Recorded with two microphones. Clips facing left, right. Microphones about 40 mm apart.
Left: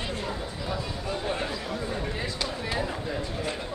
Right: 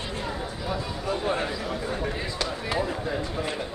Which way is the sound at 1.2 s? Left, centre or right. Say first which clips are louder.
Right 3 dB; right.